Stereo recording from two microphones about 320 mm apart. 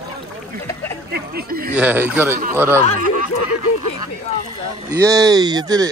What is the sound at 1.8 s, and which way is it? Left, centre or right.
Speech, centre.